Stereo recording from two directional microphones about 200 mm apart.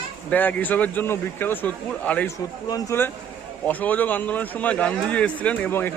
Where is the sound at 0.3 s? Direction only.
10° left (ahead or behind).